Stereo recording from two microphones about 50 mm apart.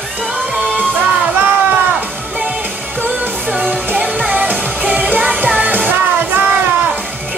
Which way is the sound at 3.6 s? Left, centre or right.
Right.